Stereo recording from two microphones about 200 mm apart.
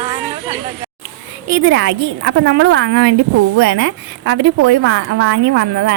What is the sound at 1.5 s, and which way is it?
A woman's voice, 60° right (ahead or behind).